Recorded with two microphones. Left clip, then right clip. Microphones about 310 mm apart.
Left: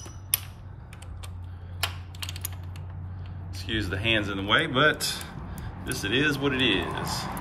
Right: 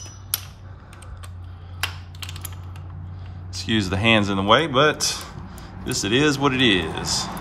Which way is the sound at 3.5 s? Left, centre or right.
Centre.